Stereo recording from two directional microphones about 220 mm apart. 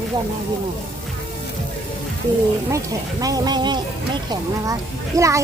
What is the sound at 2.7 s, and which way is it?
A child's voice, 15° right (ahead or behind).